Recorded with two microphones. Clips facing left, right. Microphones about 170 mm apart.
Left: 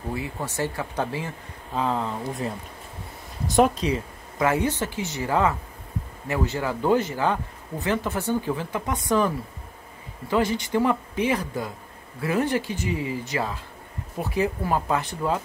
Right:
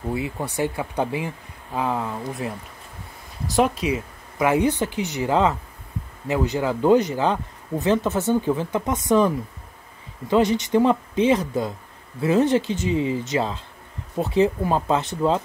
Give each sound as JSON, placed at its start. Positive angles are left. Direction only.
{"t": 0.1, "sound": "speech", "side_deg": -15}
{"t": 3.4, "sound": "speech", "side_deg": 0}